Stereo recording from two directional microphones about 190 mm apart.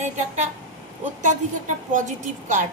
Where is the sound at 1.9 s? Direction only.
40° right (ahead or behind).